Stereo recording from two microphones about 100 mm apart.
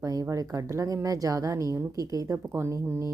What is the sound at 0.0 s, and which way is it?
Speech, 35° right (ahead or behind).